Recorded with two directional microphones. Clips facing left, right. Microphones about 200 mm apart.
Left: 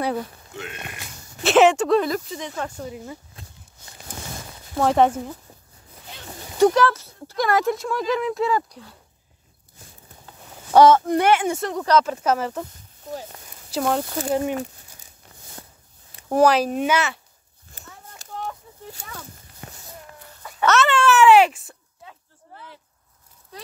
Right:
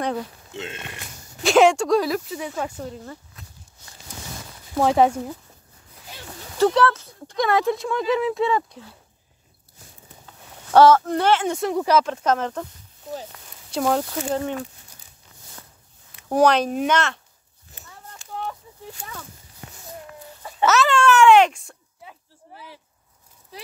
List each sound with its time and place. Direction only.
1.4 s speech: 5° left (ahead or behind)
2.9 s speech: 10° left (ahead or behind)
4.1 s a sound: 50° left (ahead or behind)
4.7 s speech: 5° right (ahead or behind)
6.6 s speech: 10° left (ahead or behind)
10.7 s speech: 15° left (ahead or behind)
11.6 s speech: 10° right (ahead or behind)
12.0 s speech: 5° left (ahead or behind)
13.7 s speech: centre (ahead or behind)
16.3 s speech: 5° left (ahead or behind)
18.2 s a sound: 40° left (ahead or behind)
20.6 s a child's voice: centre (ahead or behind)
22.0 s a sound: 15° right (ahead or behind)